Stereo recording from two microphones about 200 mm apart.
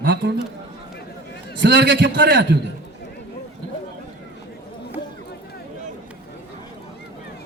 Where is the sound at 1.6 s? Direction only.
60° right (ahead or behind).